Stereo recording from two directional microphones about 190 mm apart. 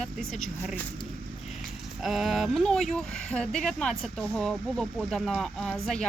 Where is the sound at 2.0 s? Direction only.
Centre (ahead or behind).